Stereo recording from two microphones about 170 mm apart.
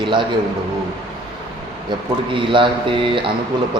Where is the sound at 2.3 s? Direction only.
30° right (ahead or behind).